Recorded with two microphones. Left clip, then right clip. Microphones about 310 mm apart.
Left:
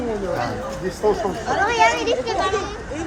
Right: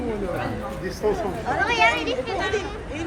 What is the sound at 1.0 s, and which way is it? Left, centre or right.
Speech, left.